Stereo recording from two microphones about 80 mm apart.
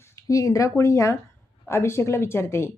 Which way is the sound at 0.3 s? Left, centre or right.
Left.